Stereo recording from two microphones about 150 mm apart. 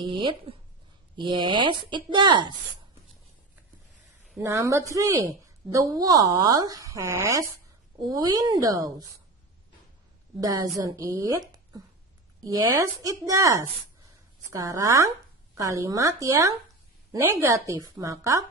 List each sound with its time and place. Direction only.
0.0 s speech: 35° right (ahead or behind)
4.4 s a woman's voice: 20° right (ahead or behind)
10.4 s a woman's voice: 25° right (ahead or behind)